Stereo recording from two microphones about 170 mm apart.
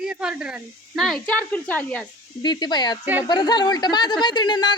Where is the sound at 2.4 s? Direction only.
25° left (ahead or behind).